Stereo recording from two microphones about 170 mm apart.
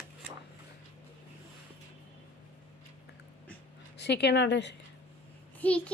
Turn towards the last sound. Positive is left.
turn(degrees=10)  # may be behind; listen again after turning